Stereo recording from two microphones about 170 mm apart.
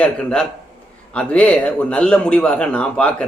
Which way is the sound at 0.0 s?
5° left (ahead or behind).